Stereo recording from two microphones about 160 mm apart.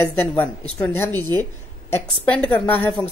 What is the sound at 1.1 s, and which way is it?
Speech, 25° right (ahead or behind).